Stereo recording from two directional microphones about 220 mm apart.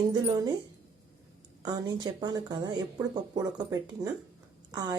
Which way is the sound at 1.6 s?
20° right (ahead or behind).